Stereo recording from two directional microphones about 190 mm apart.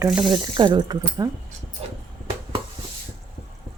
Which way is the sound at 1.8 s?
35° right (ahead or behind).